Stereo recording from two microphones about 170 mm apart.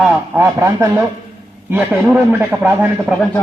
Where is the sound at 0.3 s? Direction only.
15° right (ahead or behind).